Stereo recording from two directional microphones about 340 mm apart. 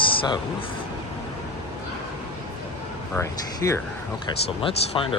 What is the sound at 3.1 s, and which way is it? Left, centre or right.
Speech, centre.